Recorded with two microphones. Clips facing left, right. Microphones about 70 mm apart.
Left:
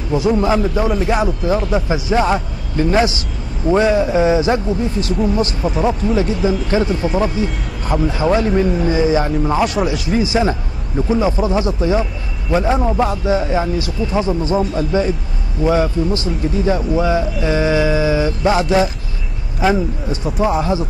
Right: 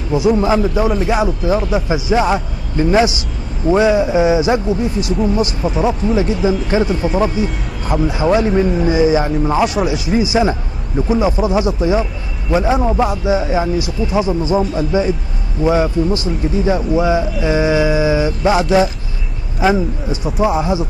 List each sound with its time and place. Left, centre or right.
0.1 s a man's voice: centre
6.7 s speech: centre
7.8 s a man's voice: centre